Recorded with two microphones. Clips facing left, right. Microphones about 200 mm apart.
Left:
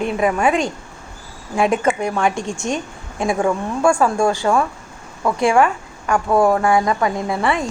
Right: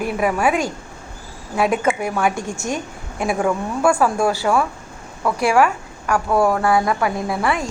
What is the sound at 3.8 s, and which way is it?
A woman's voice, 5° right (ahead or behind).